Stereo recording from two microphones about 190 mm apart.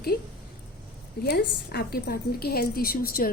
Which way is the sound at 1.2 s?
60° left (ahead or behind).